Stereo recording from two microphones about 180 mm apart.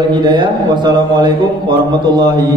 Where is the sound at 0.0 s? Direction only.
25° right (ahead or behind).